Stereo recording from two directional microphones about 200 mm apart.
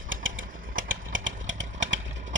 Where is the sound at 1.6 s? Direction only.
35° right (ahead or behind).